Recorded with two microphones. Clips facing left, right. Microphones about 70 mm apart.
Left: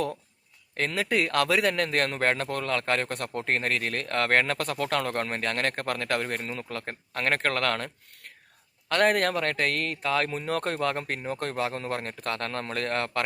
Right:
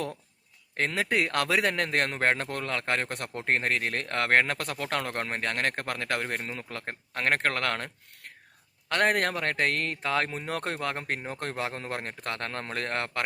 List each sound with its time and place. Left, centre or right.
0.8 s a man's voice: right
8.9 s a man's voice: right